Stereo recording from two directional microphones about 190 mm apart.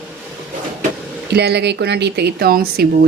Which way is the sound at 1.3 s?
60° right (ahead or behind).